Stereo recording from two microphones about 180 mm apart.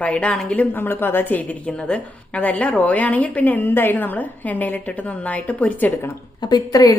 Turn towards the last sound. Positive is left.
turn(degrees=20)  # may be behind; listen again after turning